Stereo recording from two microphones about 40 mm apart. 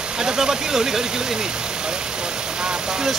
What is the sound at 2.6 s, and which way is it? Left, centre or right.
Speech, centre.